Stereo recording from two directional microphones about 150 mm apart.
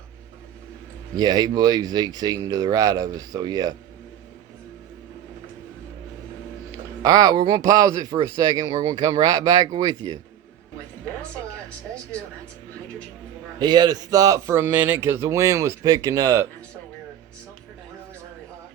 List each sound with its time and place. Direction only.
1.1 s speech: 25° right (ahead or behind)
6.7 s speech: 25° right (ahead or behind)
13.6 s speech: 30° right (ahead or behind)